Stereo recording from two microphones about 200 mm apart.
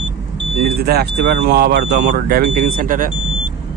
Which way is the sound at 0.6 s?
50° right (ahead or behind).